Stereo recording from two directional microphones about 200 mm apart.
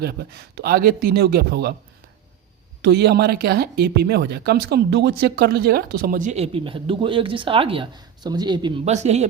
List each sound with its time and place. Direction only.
0.0 s speech: 50° right (ahead or behind)
2.8 s speech: 55° right (ahead or behind); by 9.3 s 35° right (ahead or behind)